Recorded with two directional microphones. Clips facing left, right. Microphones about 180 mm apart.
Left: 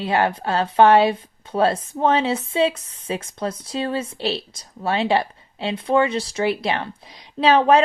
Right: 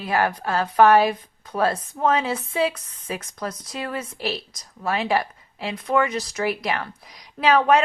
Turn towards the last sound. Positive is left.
turn(degrees=30)  # may be behind; listen again after turning